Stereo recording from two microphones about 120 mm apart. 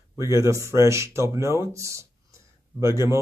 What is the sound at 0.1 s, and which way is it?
Speech, 25° right (ahead or behind).